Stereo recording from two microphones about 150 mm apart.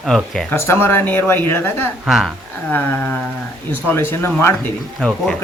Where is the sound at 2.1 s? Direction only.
Centre (ahead or behind).